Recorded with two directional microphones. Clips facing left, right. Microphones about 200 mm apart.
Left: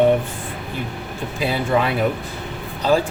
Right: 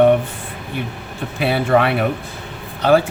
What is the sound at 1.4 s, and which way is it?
Speech, 65° right (ahead or behind).